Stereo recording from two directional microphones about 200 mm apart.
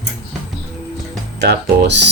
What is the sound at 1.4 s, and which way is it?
Speech, 55° right (ahead or behind).